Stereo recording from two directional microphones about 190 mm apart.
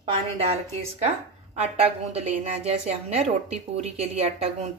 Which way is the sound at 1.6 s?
35° right (ahead or behind).